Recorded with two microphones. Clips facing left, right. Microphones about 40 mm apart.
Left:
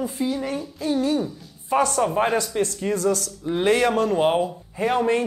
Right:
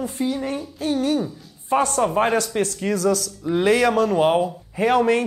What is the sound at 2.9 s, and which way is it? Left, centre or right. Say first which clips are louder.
Speech: right 2 dB; right.